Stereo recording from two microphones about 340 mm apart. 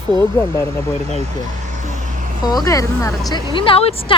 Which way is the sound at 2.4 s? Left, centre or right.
Centre.